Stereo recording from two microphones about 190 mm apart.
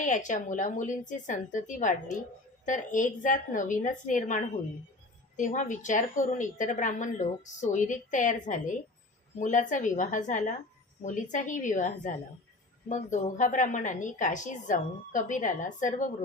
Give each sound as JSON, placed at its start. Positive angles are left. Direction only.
{"t": 0.0, "sound": "a woman's voice", "side_deg": 40}